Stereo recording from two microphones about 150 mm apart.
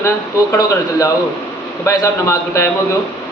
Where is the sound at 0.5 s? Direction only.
20° left (ahead or behind).